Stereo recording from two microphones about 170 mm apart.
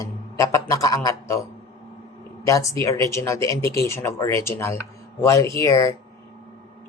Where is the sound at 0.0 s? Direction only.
20° left (ahead or behind).